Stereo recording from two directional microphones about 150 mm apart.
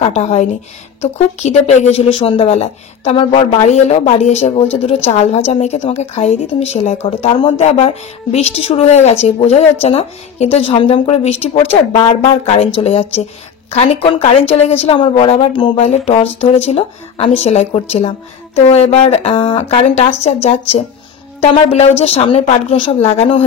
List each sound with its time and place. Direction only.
0.1 s a woman's voice: 45° left (ahead or behind)